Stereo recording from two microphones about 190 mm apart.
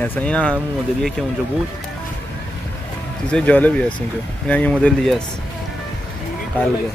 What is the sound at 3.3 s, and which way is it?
Speech, 10° left (ahead or behind).